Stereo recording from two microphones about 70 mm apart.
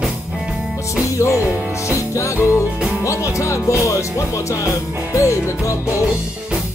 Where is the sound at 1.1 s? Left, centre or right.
Left.